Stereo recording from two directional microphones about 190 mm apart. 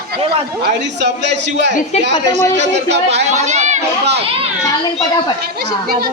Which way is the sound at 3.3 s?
35° right (ahead or behind).